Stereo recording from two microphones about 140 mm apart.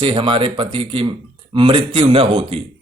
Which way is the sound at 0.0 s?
40° right (ahead or behind).